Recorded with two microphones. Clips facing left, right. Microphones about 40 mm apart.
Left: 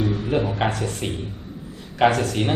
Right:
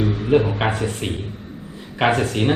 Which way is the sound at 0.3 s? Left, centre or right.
Centre.